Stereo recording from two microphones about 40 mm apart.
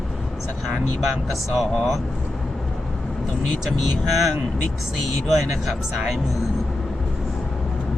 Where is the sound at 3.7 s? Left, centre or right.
Centre.